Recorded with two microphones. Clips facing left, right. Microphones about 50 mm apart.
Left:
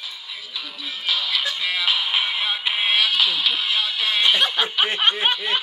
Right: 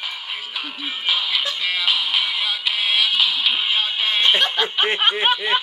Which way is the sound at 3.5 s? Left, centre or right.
Centre.